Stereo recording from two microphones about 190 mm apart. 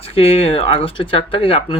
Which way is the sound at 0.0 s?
30° left (ahead or behind).